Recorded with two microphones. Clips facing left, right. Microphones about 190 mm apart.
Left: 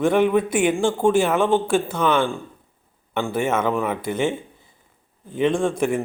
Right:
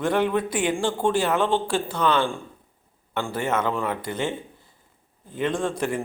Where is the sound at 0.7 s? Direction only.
20° left (ahead or behind).